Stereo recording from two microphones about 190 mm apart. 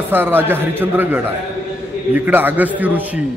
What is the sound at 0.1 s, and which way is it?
A man's voice, 10° right (ahead or behind).